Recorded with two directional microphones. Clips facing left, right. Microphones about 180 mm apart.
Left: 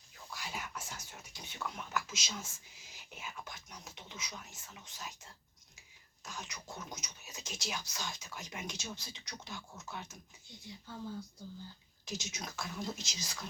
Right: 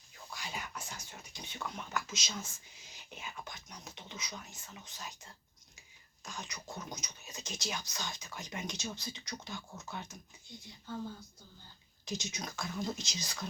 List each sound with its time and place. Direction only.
0.3 s speech: 5° left (ahead or behind)
12.0 s speech: 5° left (ahead or behind)